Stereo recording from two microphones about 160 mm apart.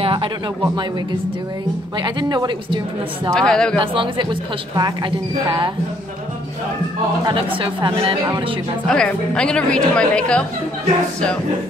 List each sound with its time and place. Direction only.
0.0 s a sound: 30° right (ahead or behind)
2.0 s speech: 30° right (ahead or behind)
3.3 s speech: 5° left (ahead or behind)
3.8 s speech: 30° right (ahead or behind)
7.2 s speech: 35° right (ahead or behind)
8.8 s a woman's voice: 5° left (ahead or behind)